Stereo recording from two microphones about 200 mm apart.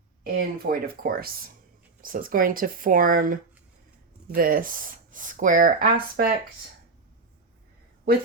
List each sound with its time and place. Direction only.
0.3 s speech: 50° right (ahead or behind)
4.4 s speech: 45° right (ahead or behind)